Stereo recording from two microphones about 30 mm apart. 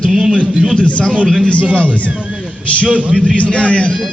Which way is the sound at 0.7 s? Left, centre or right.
Left.